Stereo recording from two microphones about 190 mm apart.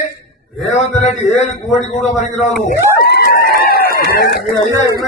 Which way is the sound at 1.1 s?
Centre (ahead or behind).